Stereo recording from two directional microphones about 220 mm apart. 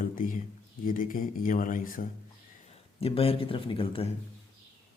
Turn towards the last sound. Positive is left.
turn(degrees=25)  # may be behind; listen again after turning